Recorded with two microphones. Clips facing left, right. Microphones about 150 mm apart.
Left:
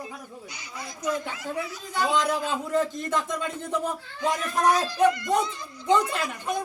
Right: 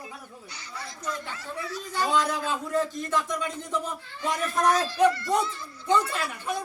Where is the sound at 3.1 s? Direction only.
25° left (ahead or behind).